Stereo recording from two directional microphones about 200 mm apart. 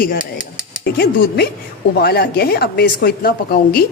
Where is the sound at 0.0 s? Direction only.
45° left (ahead or behind).